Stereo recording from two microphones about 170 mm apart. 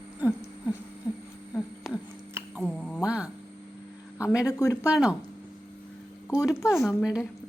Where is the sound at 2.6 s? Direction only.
5° left (ahead or behind).